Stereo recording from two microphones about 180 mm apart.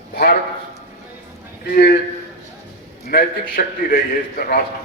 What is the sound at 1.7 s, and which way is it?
Speech, 60° left (ahead or behind).